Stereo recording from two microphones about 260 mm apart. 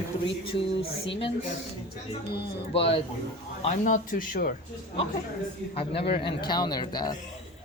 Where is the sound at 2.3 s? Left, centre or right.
Left.